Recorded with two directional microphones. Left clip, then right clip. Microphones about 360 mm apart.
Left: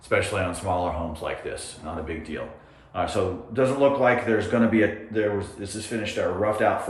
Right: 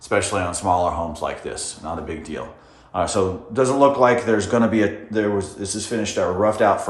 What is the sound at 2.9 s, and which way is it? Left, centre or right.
Speech, centre.